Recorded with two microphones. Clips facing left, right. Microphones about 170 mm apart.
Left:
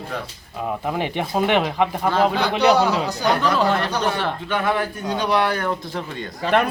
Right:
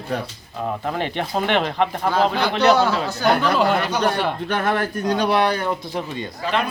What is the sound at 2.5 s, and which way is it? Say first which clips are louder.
Speech: even; 10° left (ahead or behind).